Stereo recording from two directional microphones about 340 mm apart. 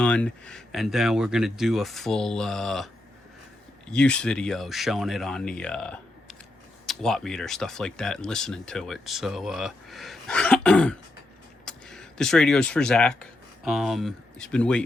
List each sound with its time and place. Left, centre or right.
0.0 s speech: centre
3.9 s speech: centre